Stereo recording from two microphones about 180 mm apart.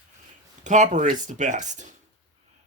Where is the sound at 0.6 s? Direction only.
40° right (ahead or behind).